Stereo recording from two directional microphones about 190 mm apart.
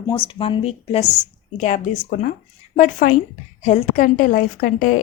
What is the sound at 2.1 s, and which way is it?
A woman's voice, 50° left (ahead or behind).